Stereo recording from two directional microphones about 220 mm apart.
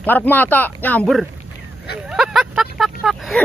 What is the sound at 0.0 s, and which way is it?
Speech, 10° left (ahead or behind).